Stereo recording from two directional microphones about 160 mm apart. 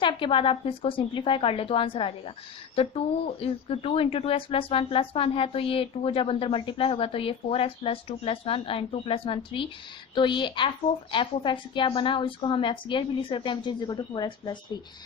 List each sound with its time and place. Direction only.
0.0 s a woman's voice: 30° left (ahead or behind)